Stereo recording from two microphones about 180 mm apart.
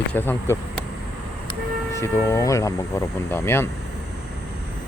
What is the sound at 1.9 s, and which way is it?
Speech, 15° left (ahead or behind).